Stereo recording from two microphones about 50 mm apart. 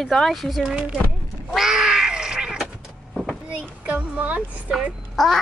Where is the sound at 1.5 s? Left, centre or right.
Centre.